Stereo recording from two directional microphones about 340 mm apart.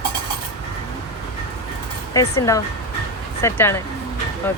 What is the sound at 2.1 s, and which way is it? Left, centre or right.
Speech, centre.